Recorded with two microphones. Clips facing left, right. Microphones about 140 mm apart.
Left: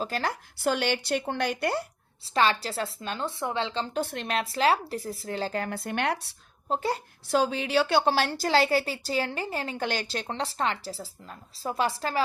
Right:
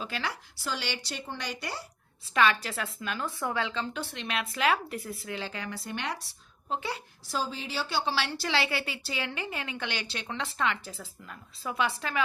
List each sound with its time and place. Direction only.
0.0 s speech: 45° left (ahead or behind)
2.3 s a woman's voice: 30° left (ahead or behind)
4.0 s a woman's voice: 50° left (ahead or behind)
6.7 s a woman's voice: 40° left (ahead or behind)
7.3 s a woman's voice: 65° left (ahead or behind); by 12.2 s 40° left (ahead or behind)